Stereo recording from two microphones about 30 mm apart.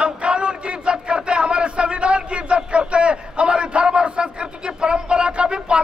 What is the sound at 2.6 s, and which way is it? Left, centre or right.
A man's voice, right.